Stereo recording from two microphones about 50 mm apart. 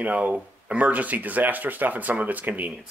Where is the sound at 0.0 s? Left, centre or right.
Right.